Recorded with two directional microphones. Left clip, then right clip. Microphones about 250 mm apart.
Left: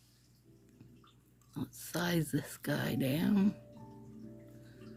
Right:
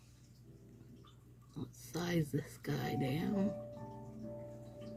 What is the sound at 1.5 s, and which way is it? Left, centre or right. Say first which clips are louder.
Speech: left 5 dB; left.